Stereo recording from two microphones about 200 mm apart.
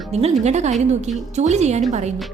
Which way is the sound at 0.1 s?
35° right (ahead or behind).